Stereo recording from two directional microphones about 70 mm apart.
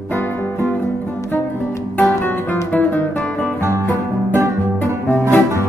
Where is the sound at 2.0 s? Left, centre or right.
Left.